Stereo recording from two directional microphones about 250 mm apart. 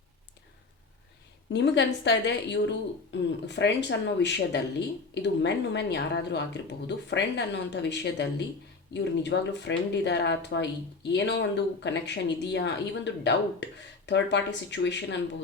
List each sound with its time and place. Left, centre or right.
1.5 s speech: left